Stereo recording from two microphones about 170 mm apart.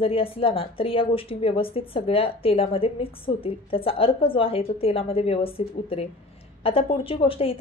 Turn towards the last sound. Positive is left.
turn(degrees=30)  # may be behind; listen again after turning